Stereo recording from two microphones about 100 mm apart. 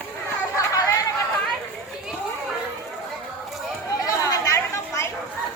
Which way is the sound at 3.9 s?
35° left (ahead or behind).